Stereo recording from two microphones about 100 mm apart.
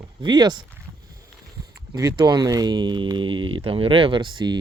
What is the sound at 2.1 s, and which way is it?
Speech, 45° right (ahead or behind).